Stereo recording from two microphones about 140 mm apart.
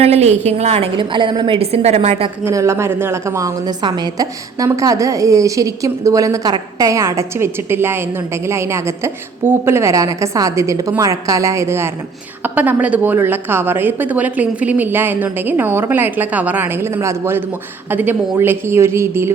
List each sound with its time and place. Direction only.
0.0 s a woman's voice: 50° right (ahead or behind)
2.4 s a woman's voice: 20° right (ahead or behind)